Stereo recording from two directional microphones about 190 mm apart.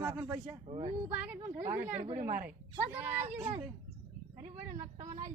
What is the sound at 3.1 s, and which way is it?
Speech, 35° right (ahead or behind).